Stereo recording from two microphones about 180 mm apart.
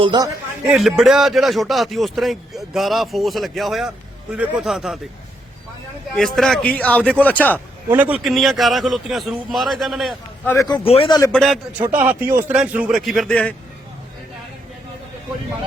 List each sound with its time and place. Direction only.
0.0 s speech: 25° right (ahead or behind)
0.7 s speech: centre (ahead or behind)
6.1 s a man's voice: 5° left (ahead or behind)
7.9 s speech: 10° right (ahead or behind)
10.5 s a man's voice: 15° left (ahead or behind)
10.8 s a man's voice: 30° left (ahead or behind)
11.3 s speech: centre (ahead or behind)